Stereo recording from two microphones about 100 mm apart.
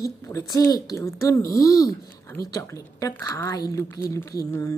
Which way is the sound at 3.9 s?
30° left (ahead or behind).